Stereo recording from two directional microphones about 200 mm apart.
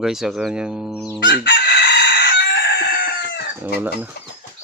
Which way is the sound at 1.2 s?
60° left (ahead or behind).